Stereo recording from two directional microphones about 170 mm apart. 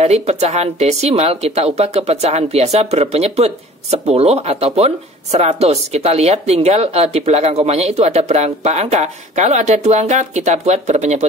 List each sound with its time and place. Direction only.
0.0 s speech: 40° right (ahead or behind)